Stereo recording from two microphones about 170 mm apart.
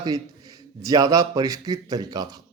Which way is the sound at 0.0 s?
20° right (ahead or behind).